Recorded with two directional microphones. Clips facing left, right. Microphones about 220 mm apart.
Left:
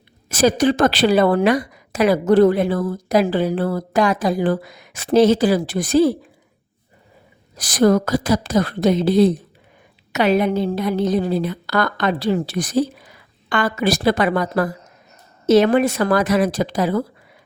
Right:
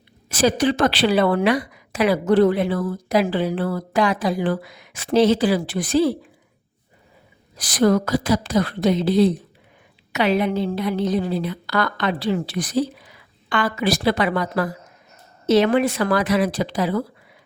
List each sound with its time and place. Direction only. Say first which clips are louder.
0.3 s a woman's voice: left 3 dB; 45° left (ahead or behind)
7.5 s a woman's voice: left 2 dB; 45° left (ahead or behind)